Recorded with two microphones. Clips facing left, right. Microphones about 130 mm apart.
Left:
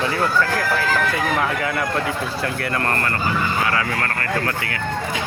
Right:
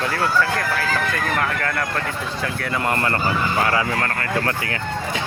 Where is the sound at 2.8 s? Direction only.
10° right (ahead or behind).